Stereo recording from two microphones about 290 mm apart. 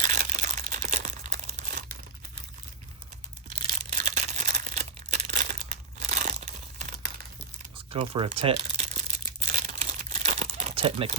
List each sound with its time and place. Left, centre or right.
0.0 s crumpling: right
3.8 s a sound: right
7.9 s crumpling: centre